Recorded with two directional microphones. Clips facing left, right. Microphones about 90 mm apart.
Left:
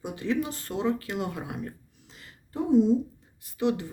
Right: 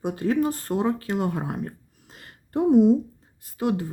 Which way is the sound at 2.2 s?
60° right (ahead or behind).